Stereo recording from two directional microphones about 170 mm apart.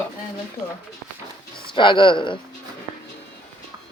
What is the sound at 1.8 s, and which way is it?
Speech, 30° left (ahead or behind).